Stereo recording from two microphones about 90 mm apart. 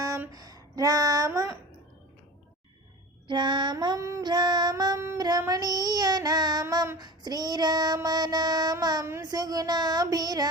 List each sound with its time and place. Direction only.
0.3 s speech: 45° right (ahead or behind)
3.2 s child singing: 55° right (ahead or behind)
3.9 s music: 35° right (ahead or behind)
4.2 s child singing: 55° right (ahead or behind)
4.7 s female singing: 50° right (ahead or behind)
5.1 s child singing: 45° right (ahead or behind)